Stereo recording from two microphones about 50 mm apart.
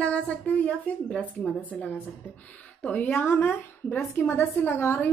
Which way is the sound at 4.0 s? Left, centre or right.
Left.